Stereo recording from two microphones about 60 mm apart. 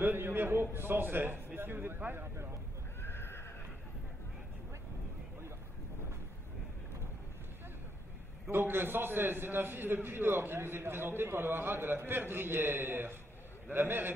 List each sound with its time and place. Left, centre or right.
0.0 s a man's voice: right
3.0 s horse: left
8.5 s a man's voice: right